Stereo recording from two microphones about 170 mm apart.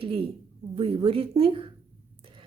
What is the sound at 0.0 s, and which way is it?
A woman's voice, 30° right (ahead or behind).